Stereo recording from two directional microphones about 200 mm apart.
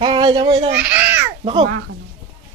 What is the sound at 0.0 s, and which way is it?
Speech, 20° right (ahead or behind).